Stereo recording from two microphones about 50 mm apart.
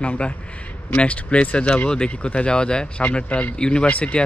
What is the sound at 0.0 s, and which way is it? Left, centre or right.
Speech, left.